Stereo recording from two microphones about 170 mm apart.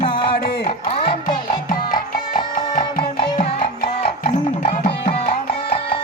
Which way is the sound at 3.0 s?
35° left (ahead or behind).